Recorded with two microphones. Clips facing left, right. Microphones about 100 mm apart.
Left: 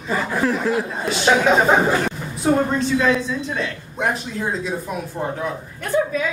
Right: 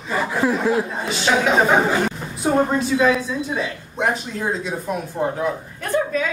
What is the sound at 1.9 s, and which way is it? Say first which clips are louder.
A woman's voice: even; 5° right (ahead or behind).